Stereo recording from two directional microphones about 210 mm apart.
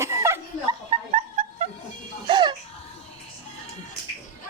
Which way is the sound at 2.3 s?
20° right (ahead or behind).